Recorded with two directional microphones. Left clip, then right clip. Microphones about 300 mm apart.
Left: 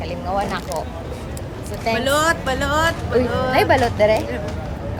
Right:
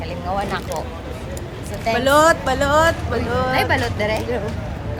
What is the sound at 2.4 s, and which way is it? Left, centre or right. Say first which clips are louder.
Speech: right 3 dB; centre.